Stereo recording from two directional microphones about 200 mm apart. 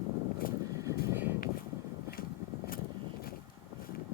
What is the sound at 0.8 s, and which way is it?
Vehicle, 10° right (ahead or behind).